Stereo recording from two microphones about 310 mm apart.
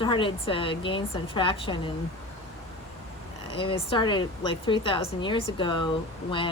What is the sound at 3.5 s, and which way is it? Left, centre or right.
Speech, centre.